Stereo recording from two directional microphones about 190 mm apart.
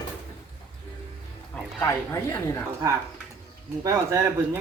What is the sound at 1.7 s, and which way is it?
Speech, 10° left (ahead or behind).